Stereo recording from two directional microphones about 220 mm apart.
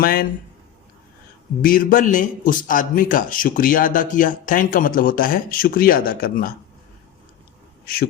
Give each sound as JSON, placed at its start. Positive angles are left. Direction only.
{"t": 0.0, "sound": "a man's voice", "side_deg": 40}
{"t": 1.6, "sound": "a man's voice", "side_deg": 40}